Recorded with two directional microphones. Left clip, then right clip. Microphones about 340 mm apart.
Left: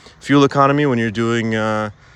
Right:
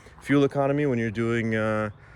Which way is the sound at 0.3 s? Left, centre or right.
Centre.